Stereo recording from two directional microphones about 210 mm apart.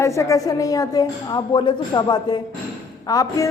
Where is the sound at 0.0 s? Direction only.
15° left (ahead or behind).